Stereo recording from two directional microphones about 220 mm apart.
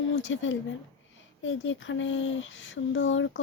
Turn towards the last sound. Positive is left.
turn(degrees=60)  # may be behind; listen again after turning